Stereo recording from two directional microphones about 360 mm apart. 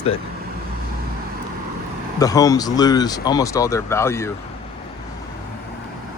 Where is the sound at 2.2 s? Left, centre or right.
Centre.